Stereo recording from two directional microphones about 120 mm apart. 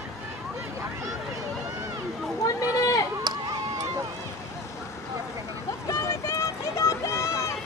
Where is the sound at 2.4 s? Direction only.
30° left (ahead or behind).